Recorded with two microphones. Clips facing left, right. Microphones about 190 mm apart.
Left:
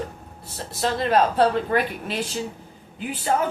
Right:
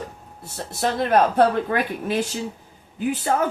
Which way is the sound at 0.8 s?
55° right (ahead or behind).